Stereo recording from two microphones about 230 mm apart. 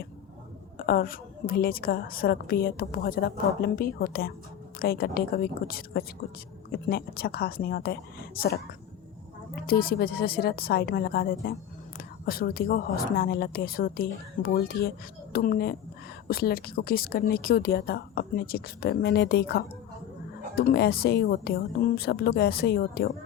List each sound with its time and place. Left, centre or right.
0.8 s a woman's voice: left